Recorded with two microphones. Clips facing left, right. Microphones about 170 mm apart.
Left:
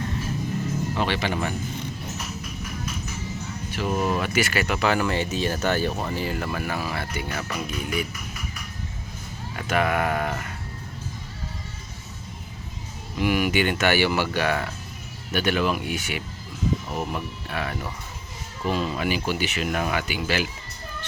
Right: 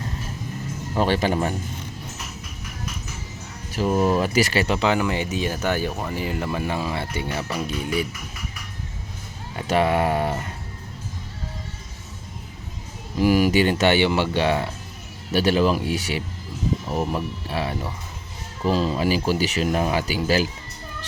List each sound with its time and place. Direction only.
0.9 s speech: 40° right (ahead or behind)
3.7 s speech: 35° right (ahead or behind); by 6.1 s 5° right (ahead or behind)
6.1 s speech: 20° right (ahead or behind)
9.6 s speech: 30° right (ahead or behind)
13.1 s speech: 35° right (ahead or behind)